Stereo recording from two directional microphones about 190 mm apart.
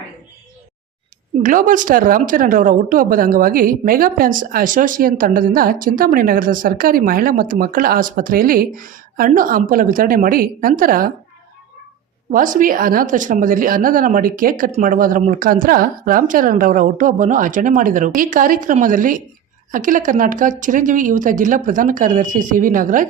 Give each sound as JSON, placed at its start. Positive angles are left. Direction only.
{"t": 1.4, "sound": "a woman's voice", "side_deg": -45}
{"t": 12.3, "sound": "a woman's voice", "side_deg": -45}